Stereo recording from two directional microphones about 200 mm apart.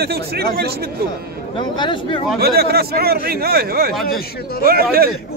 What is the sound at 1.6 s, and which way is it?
Speech, 25° left (ahead or behind).